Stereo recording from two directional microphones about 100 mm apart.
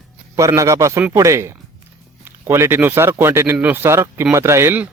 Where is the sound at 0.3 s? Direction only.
30° right (ahead or behind).